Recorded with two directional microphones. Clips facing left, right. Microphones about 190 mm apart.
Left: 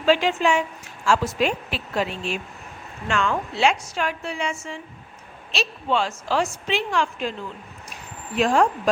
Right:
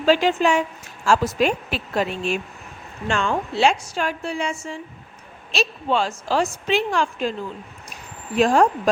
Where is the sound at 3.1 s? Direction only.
30° right (ahead or behind).